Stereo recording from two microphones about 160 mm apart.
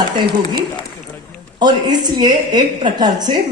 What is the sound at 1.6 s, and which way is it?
A woman's voice, 25° right (ahead or behind).